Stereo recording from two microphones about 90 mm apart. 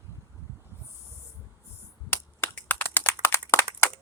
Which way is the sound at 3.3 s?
30° left (ahead or behind).